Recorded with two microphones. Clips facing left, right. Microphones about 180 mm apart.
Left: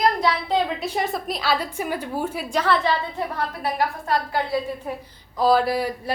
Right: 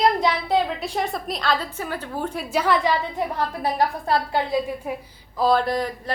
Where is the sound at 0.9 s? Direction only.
Centre (ahead or behind).